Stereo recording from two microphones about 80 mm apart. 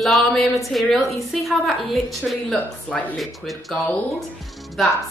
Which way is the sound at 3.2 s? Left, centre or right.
Centre.